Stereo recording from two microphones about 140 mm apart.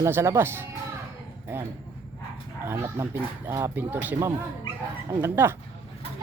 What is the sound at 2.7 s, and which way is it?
Speech, 20° right (ahead or behind).